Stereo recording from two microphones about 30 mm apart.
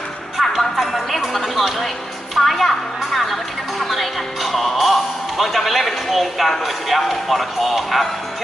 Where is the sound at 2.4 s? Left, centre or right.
Centre.